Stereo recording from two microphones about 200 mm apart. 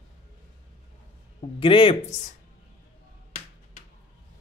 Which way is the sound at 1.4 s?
25° left (ahead or behind).